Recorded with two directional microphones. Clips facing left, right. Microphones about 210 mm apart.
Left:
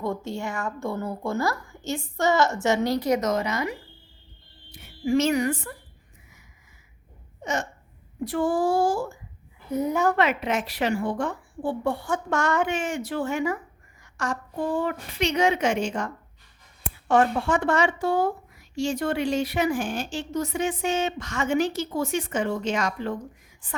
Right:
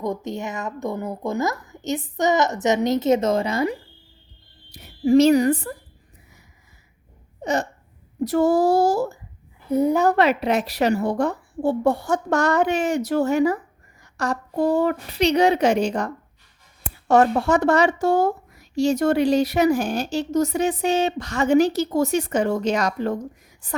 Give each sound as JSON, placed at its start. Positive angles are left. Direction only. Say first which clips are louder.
{"t": 0.0, "sound": "a woman's voice", "louder": "right 2 dB", "side_deg": -20}
{"t": 7.4, "sound": "hiccup", "louder": "right 5 dB", "side_deg": -35}
{"t": 8.2, "sound": "a woman's voice", "louder": "right 6 dB", "side_deg": -40}